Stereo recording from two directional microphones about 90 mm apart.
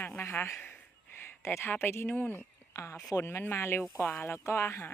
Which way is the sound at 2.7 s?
35° left (ahead or behind).